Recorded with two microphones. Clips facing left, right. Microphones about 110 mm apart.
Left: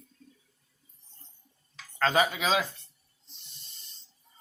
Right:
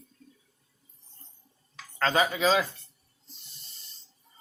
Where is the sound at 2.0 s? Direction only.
5° left (ahead or behind).